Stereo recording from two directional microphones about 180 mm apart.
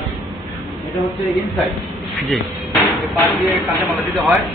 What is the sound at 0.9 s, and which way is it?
Speech, centre (ahead or behind).